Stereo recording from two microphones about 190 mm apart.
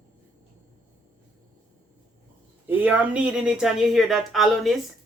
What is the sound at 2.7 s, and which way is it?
Speech, 10° right (ahead or behind).